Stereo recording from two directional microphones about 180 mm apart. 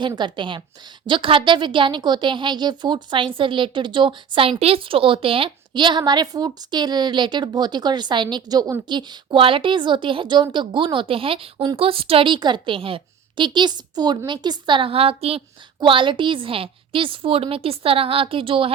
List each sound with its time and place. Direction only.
0.2 s a woman's voice: 25° right (ahead or behind)